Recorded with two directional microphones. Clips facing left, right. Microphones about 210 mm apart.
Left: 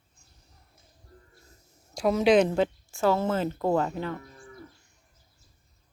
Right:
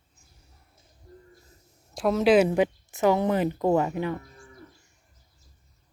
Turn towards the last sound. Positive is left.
turn(degrees=-15)  # may be behind; listen again after turning